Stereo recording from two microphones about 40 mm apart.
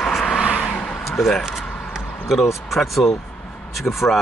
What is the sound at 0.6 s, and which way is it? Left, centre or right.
Vehicle, left.